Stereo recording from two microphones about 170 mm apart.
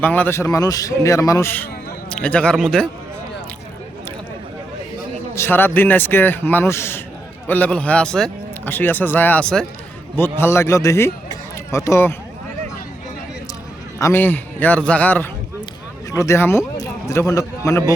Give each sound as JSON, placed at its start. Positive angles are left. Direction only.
{"t": 0.0, "sound": "a man's voice", "side_deg": 10}
{"t": 5.3, "sound": "speech", "side_deg": 15}
{"t": 14.0, "sound": "a man's voice", "side_deg": 10}